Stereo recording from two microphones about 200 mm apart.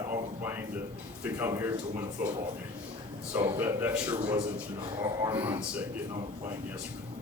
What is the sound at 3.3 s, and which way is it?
A man's voice, 10° right (ahead or behind).